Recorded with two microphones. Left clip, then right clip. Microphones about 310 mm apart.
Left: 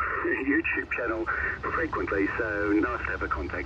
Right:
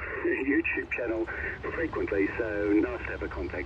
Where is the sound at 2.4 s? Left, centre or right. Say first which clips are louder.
Left 1 dB; left.